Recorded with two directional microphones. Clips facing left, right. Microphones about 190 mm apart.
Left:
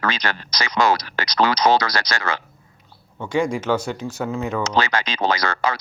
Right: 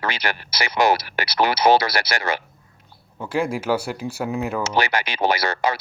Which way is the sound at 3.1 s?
5° right (ahead or behind).